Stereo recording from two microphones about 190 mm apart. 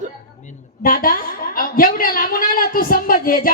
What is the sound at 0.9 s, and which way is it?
A woman's voice, 50° left (ahead or behind).